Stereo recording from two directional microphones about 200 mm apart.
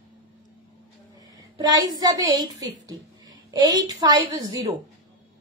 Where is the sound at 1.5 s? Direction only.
20° right (ahead or behind).